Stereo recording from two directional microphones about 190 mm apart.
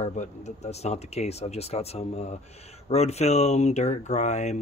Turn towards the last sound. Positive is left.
turn(degrees=35)  # may be behind; listen again after turning